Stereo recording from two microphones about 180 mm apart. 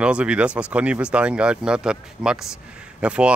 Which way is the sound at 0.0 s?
5° right (ahead or behind).